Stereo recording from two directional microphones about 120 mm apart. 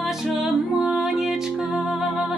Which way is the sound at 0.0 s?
5° right (ahead or behind).